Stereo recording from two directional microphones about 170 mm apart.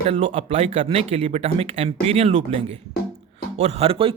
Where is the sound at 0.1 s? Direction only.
35° right (ahead or behind).